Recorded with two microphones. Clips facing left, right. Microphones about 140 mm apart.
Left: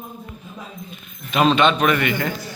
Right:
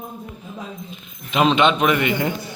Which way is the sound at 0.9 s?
25° right (ahead or behind).